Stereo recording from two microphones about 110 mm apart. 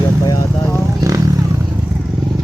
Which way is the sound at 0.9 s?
30° right (ahead or behind).